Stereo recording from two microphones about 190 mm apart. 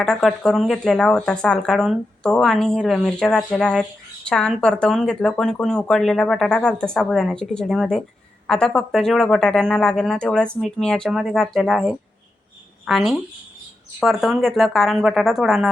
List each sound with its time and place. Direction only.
0.0 s speech: 5° left (ahead or behind)